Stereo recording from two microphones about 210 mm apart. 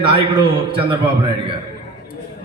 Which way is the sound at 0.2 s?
25° right (ahead or behind).